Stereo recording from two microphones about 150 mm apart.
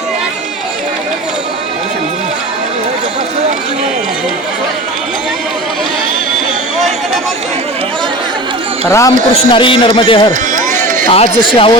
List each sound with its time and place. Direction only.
8.9 s speech: 20° left (ahead or behind)
9.3 s a man's voice: 35° left (ahead or behind)
10.5 s a sound: 55° right (ahead or behind)
11.1 s a man's voice: 40° left (ahead or behind)